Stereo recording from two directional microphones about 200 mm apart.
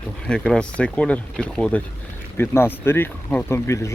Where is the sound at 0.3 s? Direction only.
5° left (ahead or behind).